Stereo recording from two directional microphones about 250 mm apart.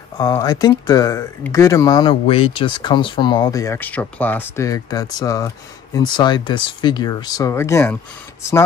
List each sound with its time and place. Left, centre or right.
0.2 s speech: centre